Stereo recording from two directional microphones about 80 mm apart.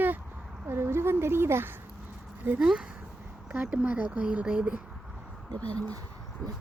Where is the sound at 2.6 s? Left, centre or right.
Centre.